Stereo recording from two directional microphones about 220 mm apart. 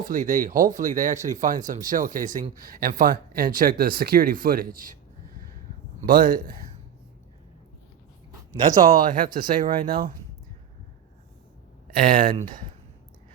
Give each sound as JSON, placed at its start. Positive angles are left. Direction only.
{"t": 0.0, "sound": "speech", "side_deg": -35}
{"t": 6.0, "sound": "speech", "side_deg": -40}
{"t": 8.9, "sound": "speech", "side_deg": -35}
{"t": 11.9, "sound": "speech", "side_deg": -40}